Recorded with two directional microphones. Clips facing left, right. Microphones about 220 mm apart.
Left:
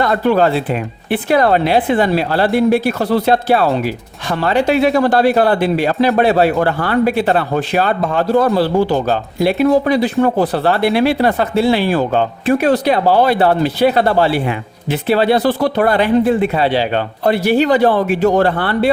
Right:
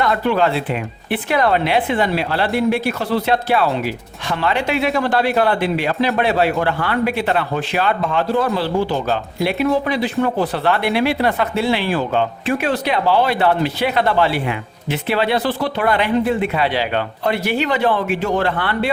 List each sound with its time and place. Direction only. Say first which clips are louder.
0.0 s speech: left 4 dB; 40° left (ahead or behind)